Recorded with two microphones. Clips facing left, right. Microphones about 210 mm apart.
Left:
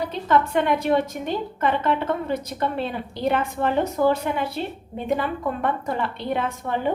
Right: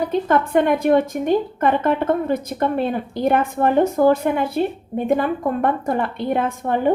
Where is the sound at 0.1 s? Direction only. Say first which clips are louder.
Right 2 dB; 50° right (ahead or behind).